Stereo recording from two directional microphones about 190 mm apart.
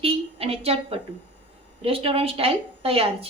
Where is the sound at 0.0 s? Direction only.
30° right (ahead or behind).